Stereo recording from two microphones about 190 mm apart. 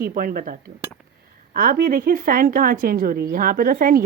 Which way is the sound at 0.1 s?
50° right (ahead or behind).